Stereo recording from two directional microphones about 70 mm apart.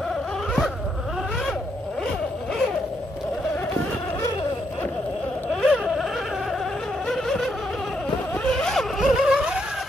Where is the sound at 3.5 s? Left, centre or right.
Left.